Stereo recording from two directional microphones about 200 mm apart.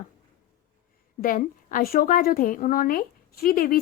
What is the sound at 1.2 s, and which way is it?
A woman's voice, 45° left (ahead or behind).